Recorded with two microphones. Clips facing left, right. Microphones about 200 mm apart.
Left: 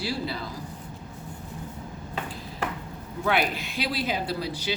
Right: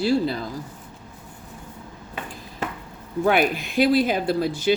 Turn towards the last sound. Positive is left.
turn(degrees=-50)  # may be behind; listen again after turning